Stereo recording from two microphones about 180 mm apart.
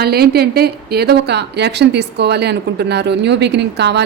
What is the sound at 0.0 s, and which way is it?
A woman's voice, 60° right (ahead or behind).